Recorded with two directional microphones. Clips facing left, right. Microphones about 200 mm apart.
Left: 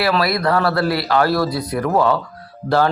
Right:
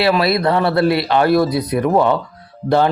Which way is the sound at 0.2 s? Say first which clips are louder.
Right 2 dB; 25° right (ahead or behind).